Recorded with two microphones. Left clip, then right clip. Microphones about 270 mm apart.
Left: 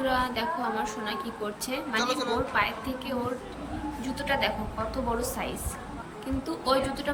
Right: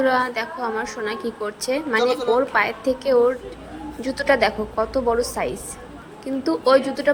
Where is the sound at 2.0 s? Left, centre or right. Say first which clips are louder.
Right 8 dB; centre.